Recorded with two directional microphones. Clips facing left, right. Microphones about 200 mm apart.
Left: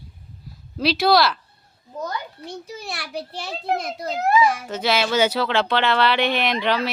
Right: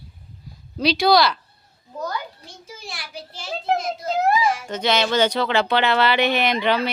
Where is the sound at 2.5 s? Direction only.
65° left (ahead or behind).